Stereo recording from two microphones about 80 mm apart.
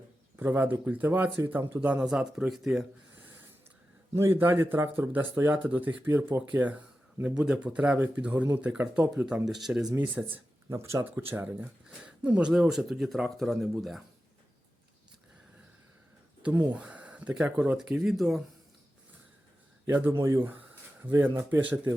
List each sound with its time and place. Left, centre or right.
0.3 s speech: right; by 2.8 s centre
4.1 s speech: right; by 9.0 s centre
9.5 s speech: centre
10.7 s speech: right
11.0 s speech: right; by 14.0 s centre
16.4 s speech: centre
17.7 s speech: centre
19.9 s speech: right
21.0 s speech: right